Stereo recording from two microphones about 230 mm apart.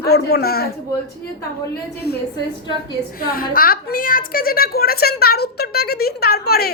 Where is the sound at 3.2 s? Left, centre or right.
Left.